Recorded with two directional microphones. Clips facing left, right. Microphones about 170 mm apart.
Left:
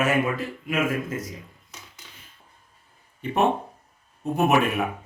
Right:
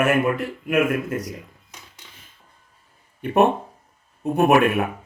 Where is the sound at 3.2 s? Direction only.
60° right (ahead or behind).